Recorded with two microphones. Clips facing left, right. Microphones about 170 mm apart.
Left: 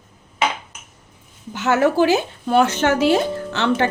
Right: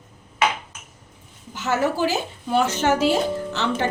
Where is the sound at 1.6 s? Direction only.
65° left (ahead or behind).